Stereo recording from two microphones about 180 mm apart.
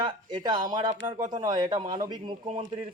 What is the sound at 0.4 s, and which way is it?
A man's voice, 25° right (ahead or behind).